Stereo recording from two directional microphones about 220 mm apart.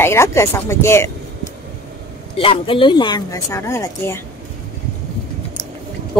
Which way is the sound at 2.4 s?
25° left (ahead or behind).